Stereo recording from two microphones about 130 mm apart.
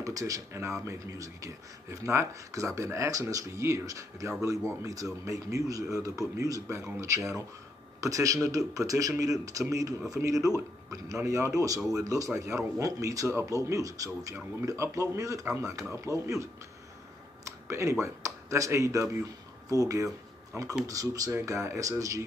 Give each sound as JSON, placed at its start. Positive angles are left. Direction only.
{"t": 0.0, "sound": "speech", "side_deg": -25}
{"t": 17.5, "sound": "speech", "side_deg": -25}